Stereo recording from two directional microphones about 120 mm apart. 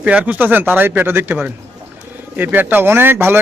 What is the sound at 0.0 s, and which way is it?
Speech, 10° right (ahead or behind).